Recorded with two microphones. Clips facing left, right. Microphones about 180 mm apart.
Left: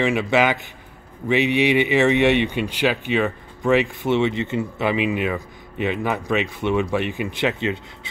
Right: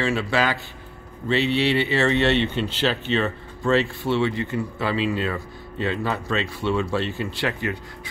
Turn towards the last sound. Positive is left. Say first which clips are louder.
# left 4 dB
turn(degrees=20)  # may be behind; listen again after turning